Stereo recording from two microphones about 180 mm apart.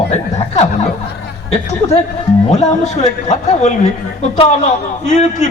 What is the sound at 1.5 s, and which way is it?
Speech, 35° left (ahead or behind).